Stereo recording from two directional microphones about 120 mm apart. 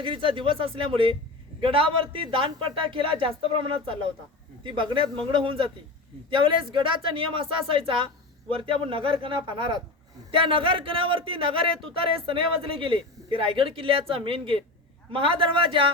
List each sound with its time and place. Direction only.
0.0 s speech: 45° right (ahead or behind)